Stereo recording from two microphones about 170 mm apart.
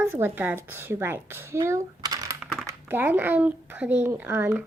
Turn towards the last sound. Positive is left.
turn(degrees=-10)  # may be behind; listen again after turning